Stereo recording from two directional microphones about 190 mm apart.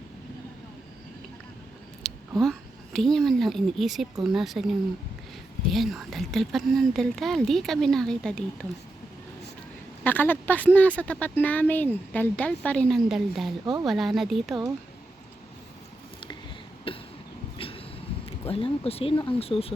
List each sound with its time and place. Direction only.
2.0 s a sound: centre (ahead or behind)
2.4 s speech: centre (ahead or behind)
5.6 s speech: centre (ahead or behind)
10.0 s a woman's voice: 10° left (ahead or behind)
16.9 s cough: 30° left (ahead or behind)
17.6 s a sound: 30° left (ahead or behind)
18.3 s speech: 30° left (ahead or behind)